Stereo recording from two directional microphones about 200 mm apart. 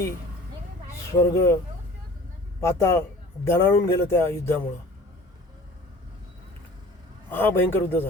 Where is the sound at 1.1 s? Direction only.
15° left (ahead or behind).